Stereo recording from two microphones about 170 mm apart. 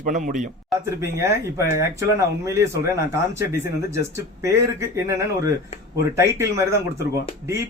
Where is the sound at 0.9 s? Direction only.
15° right (ahead or behind).